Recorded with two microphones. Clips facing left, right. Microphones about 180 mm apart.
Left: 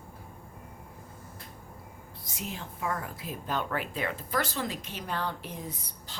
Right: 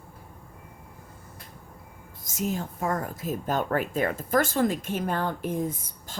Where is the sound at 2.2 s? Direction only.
45° right (ahead or behind).